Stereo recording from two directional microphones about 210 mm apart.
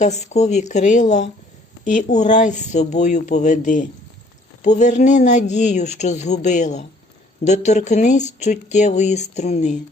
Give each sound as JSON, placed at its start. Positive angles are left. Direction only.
{"t": 0.0, "sound": "speech", "side_deg": 35}